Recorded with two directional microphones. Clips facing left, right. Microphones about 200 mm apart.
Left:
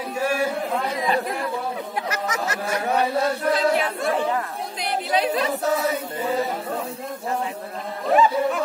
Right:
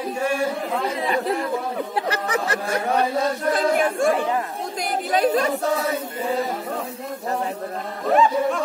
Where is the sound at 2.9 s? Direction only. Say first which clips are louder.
Even; 5° left (ahead or behind).